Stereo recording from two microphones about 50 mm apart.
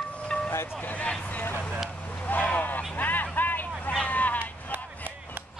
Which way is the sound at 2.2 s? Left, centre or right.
Left.